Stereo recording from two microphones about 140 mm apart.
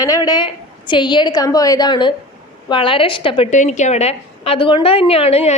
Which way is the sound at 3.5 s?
60° left (ahead or behind).